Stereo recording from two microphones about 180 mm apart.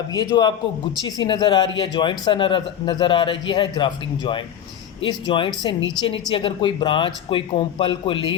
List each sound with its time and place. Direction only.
0.1 s speech: 20° left (ahead or behind)